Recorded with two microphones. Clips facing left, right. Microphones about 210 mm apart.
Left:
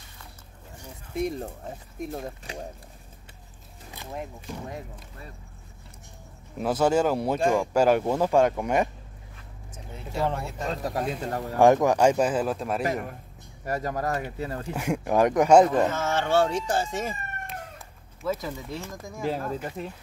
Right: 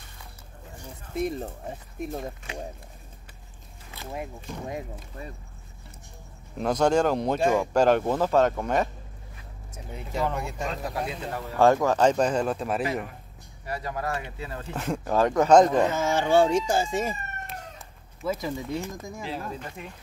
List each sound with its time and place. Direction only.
1.1 s speech: 5° right (ahead or behind)
4.0 s speech: 5° right (ahead or behind)
6.6 s speech: 5° left (ahead or behind)
7.4 s speech: 5° right (ahead or behind)
7.7 s speech: 10° left (ahead or behind)
10.7 s speech: 40° left (ahead or behind)
11.5 s speech: 15° left (ahead or behind); by 12.8 s centre (ahead or behind)
13.7 s speech: 45° left (ahead or behind)
14.7 s speech: 10° left (ahead or behind)
15.9 s speech: 10° right (ahead or behind)
18.2 s speech: 10° right (ahead or behind)
19.2 s speech: 45° left (ahead or behind)